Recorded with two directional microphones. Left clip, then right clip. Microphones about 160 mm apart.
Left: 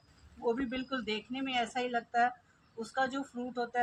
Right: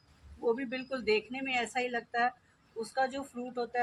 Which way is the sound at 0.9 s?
25° right (ahead or behind).